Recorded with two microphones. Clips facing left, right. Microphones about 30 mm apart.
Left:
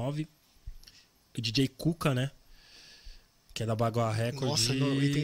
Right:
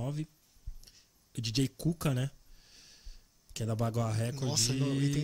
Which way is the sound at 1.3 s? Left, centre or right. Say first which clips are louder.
Left 3 dB; left.